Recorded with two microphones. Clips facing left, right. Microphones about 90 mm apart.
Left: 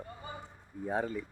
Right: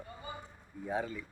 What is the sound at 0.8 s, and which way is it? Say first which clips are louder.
Speech: left 3 dB; 35° left (ahead or behind).